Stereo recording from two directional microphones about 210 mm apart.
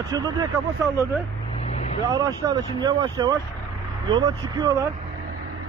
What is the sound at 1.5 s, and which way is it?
Vehicle, 30° left (ahead or behind).